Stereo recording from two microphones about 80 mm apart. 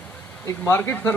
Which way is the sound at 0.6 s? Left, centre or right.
Left.